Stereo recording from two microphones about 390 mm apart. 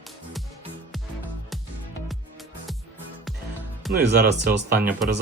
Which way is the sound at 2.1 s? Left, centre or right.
Centre.